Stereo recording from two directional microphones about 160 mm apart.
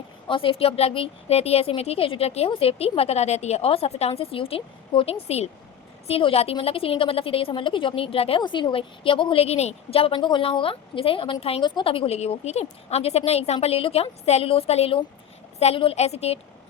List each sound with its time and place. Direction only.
0.3 s a woman's voice: 35° left (ahead or behind)